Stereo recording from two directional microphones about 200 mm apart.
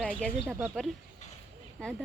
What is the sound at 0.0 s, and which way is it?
Speech, 5° left (ahead or behind).